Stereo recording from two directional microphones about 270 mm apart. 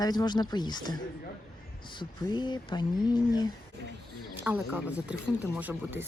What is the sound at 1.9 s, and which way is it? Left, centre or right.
Speech, centre.